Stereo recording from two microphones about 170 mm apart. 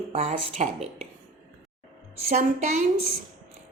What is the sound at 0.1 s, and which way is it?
Speech, 40° right (ahead or behind).